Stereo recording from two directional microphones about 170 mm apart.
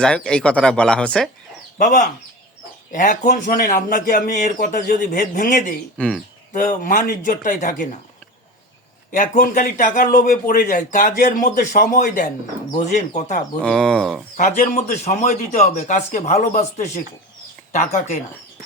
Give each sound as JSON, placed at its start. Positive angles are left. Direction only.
{"t": 0.0, "sound": "speech", "side_deg": 5}
{"t": 1.8, "sound": "a man's voice", "side_deg": 50}
{"t": 6.0, "sound": "speech", "side_deg": 5}
{"t": 6.5, "sound": "a man's voice", "side_deg": 50}
{"t": 9.1, "sound": "a man's voice", "side_deg": 50}
{"t": 13.6, "sound": "speech", "side_deg": 0}
{"t": 14.3, "sound": "a man's voice", "side_deg": 50}